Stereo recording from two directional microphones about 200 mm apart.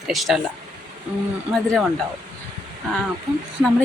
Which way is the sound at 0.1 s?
Centre (ahead or behind).